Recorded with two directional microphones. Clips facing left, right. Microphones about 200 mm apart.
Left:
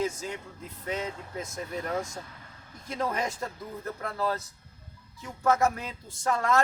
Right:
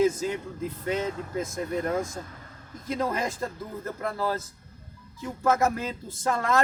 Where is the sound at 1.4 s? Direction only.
50° right (ahead or behind).